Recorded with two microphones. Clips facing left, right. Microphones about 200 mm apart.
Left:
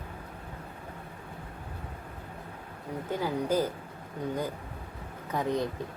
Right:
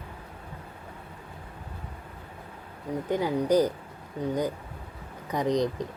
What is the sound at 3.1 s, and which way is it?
Speech, 15° right (ahead or behind).